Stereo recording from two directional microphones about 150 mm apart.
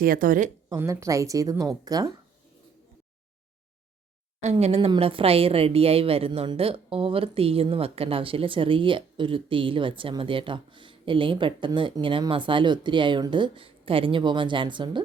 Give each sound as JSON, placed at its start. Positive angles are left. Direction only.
{"t": 0.0, "sound": "speech", "side_deg": -70}
{"t": 0.8, "sound": "a woman's voice", "side_deg": -20}
{"t": 4.5, "sound": "a woman's voice", "side_deg": -40}